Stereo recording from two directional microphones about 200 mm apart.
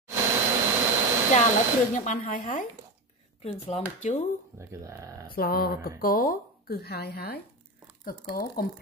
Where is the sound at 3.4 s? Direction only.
30° left (ahead or behind).